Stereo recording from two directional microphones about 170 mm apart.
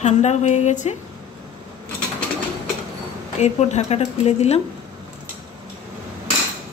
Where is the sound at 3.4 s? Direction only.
40° left (ahead or behind).